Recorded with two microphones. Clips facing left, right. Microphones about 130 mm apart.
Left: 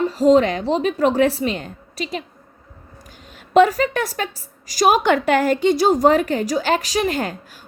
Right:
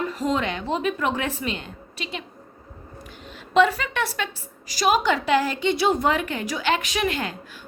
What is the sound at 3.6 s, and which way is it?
A woman's voice, 45° left (ahead or behind).